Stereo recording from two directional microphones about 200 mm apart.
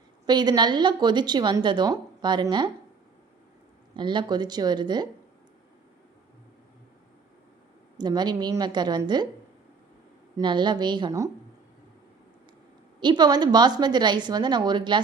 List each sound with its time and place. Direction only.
0.3 s a woman's voice: 20° right (ahead or behind)
3.9 s a woman's voice: 25° right (ahead or behind)
7.9 s a woman's voice: 20° right (ahead or behind)
10.3 s a woman's voice: 25° right (ahead or behind)
13.0 s a woman's voice: 20° right (ahead or behind)